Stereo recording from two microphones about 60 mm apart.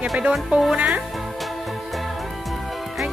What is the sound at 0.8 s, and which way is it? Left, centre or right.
Speech, right.